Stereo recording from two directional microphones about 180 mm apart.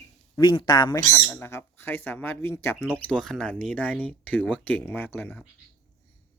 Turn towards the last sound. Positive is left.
turn(degrees=10)  # may be behind; listen again after turning